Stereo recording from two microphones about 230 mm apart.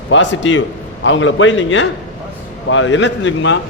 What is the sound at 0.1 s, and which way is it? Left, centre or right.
A man's voice, left.